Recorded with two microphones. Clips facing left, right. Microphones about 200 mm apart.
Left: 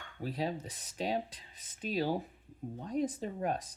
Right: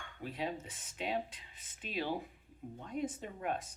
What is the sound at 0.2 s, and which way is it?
Speech, 35° left (ahead or behind).